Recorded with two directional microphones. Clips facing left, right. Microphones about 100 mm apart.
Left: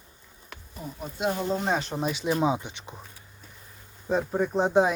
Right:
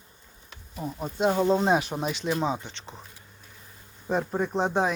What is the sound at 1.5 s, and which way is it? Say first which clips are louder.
Speech: right 5 dB; 25° right (ahead or behind).